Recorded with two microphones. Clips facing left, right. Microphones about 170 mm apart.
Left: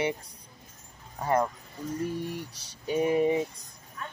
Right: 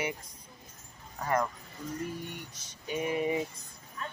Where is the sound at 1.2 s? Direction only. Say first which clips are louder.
Left 4 dB; 30° left (ahead or behind).